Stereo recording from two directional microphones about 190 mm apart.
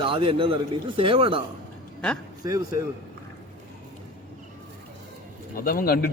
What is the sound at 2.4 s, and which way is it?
Speech, 20° right (ahead or behind).